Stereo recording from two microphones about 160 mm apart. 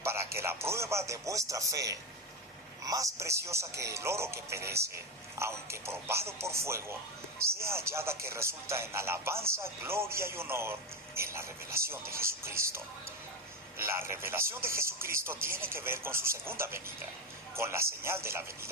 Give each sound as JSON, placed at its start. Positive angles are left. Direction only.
{"t": 0.0, "sound": "a man's voice", "side_deg": -15}